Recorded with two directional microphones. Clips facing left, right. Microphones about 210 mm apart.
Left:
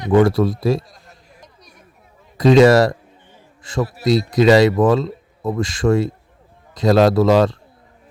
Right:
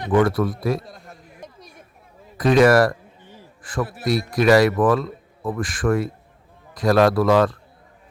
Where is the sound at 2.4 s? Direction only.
25° left (ahead or behind).